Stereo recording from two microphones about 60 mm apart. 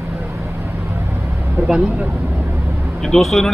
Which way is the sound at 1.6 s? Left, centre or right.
Right.